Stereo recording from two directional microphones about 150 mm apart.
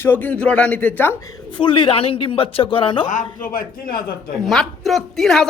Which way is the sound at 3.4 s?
70° left (ahead or behind).